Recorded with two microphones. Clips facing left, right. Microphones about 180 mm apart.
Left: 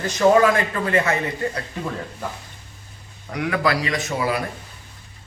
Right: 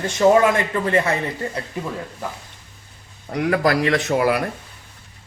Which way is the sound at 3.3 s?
40° right (ahead or behind).